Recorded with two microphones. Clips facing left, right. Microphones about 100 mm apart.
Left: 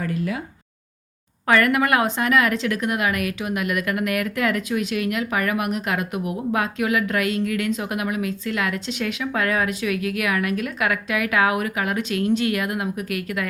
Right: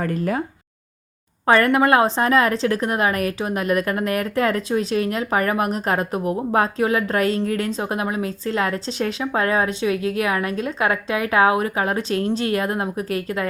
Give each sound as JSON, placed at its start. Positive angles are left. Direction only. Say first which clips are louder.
{"t": 0.0, "sound": "speech", "louder": "right 3 dB", "side_deg": -45}
{"t": 1.5, "sound": "a woman's voice", "louder": "right 3 dB", "side_deg": -30}